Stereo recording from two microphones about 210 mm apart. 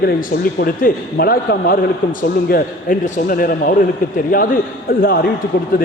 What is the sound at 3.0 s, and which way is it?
A man's voice, 40° left (ahead or behind).